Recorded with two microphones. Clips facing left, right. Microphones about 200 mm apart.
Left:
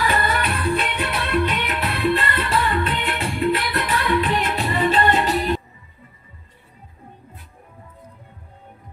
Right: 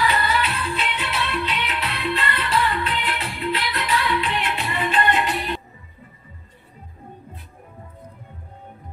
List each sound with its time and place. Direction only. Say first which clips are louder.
0.0 s music: even; 50° left (ahead or behind)